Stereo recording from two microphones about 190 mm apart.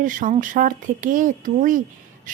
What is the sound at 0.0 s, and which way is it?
Speech, 45° right (ahead or behind).